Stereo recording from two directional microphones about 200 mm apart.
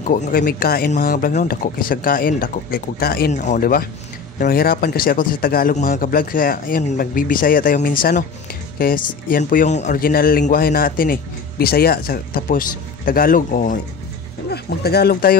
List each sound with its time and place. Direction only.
0.0 s speech: 45° left (ahead or behind)